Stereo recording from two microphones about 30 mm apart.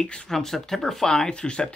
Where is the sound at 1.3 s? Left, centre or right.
Left.